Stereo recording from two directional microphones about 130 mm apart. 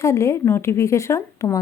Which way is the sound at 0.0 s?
20° left (ahead or behind).